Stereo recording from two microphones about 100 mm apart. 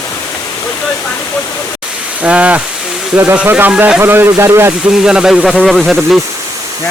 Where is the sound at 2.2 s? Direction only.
15° right (ahead or behind).